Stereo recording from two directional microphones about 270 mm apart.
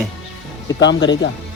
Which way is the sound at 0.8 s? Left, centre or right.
Left.